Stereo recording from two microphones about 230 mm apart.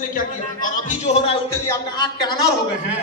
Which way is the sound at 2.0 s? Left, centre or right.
Centre.